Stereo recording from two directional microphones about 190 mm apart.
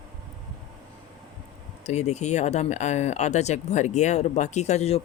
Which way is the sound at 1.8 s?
35° left (ahead or behind).